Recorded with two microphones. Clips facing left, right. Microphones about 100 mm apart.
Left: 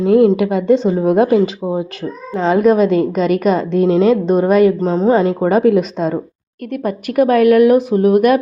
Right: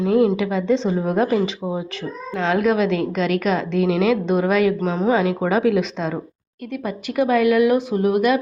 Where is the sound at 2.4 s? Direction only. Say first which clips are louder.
Left 6 dB; 40° left (ahead or behind).